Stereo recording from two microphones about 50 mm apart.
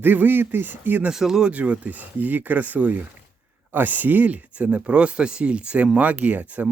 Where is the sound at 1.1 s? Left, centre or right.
Centre.